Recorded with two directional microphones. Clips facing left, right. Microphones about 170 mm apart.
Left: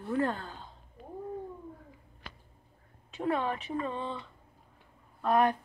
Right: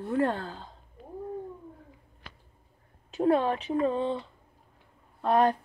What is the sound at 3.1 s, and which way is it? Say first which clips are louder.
Speech: right 7 dB; 35° right (ahead or behind).